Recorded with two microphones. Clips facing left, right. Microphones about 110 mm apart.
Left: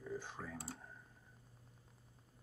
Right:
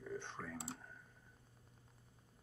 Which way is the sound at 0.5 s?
20° right (ahead or behind).